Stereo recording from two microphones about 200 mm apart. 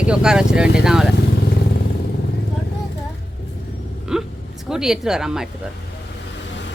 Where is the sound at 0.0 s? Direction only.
5° right (ahead or behind).